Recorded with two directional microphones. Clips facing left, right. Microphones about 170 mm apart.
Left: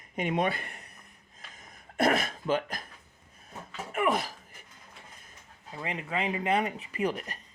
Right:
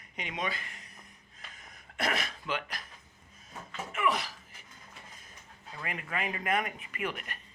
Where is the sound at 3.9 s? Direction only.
50° left (ahead or behind).